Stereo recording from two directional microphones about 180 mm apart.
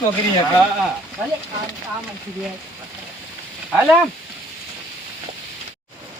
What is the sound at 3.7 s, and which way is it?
Speech, 5° right (ahead or behind).